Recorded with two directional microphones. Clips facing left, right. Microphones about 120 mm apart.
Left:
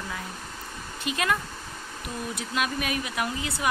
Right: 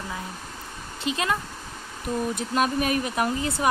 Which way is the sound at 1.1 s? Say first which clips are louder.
Right 1 dB; 30° right (ahead or behind).